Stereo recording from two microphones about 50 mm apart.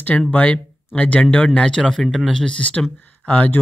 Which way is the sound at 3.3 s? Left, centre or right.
Left.